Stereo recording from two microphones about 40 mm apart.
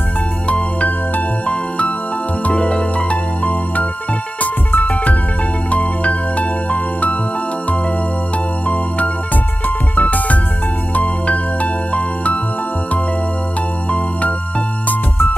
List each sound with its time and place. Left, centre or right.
0.5 s music: left
2.5 s music: left
4.4 s music: left
8.6 s music: left